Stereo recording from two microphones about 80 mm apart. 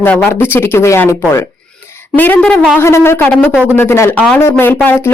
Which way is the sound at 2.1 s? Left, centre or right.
Left.